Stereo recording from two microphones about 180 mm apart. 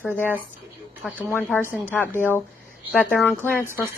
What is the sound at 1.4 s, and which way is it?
Speech, 10° left (ahead or behind).